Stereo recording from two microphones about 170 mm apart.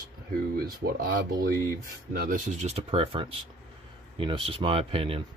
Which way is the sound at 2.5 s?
40° right (ahead or behind).